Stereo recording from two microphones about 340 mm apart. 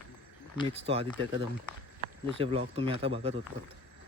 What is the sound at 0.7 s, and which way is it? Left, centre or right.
Speech, centre.